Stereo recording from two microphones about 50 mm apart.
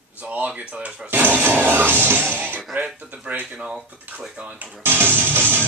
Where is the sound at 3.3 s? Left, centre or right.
Right.